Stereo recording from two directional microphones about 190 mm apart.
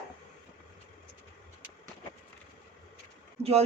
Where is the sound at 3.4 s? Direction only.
35° right (ahead or behind).